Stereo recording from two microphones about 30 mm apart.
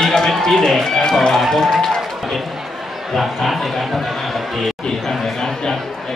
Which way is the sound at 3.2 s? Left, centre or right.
Centre.